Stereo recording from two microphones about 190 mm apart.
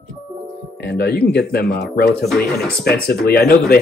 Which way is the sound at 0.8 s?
60° left (ahead or behind).